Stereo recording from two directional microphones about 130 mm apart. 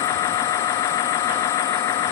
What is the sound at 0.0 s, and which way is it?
Engine, 25° left (ahead or behind).